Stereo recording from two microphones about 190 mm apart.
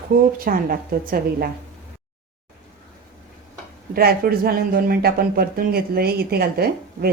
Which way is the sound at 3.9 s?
50° right (ahead or behind).